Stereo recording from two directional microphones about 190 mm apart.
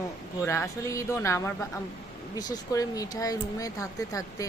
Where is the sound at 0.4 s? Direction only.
15° left (ahead or behind).